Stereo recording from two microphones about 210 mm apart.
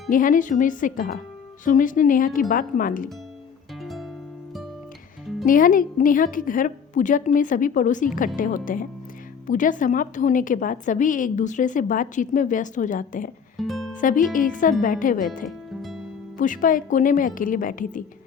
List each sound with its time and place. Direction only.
0.1 s a woman's voice: 40° left (ahead or behind)
5.5 s a woman's voice: 40° left (ahead or behind)
13.6 s music: centre (ahead or behind)
13.9 s a woman's voice: 40° left (ahead or behind)
15.4 s music: centre (ahead or behind)
16.4 s a woman's voice: 40° left (ahead or behind)